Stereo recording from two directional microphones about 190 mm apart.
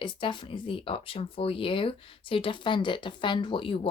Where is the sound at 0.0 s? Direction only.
25° left (ahead or behind).